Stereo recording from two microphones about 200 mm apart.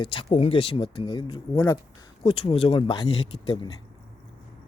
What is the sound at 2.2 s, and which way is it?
Speech, 30° left (ahead or behind).